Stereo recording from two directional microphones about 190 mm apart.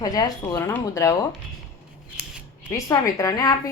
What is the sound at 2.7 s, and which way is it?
Speech, 15° left (ahead or behind).